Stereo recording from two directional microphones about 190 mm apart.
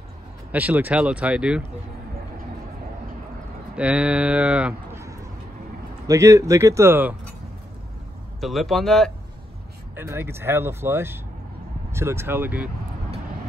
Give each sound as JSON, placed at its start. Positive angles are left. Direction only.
{"t": 0.5, "sound": "speech", "side_deg": -10}
{"t": 3.7, "sound": "speech", "side_deg": -5}
{"t": 8.4, "sound": "speech", "side_deg": 0}
{"t": 9.9, "sound": "speech", "side_deg": -10}